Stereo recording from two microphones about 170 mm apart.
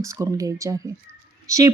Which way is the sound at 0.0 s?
20° right (ahead or behind).